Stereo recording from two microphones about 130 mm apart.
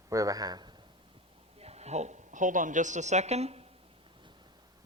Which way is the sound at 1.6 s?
55° right (ahead or behind).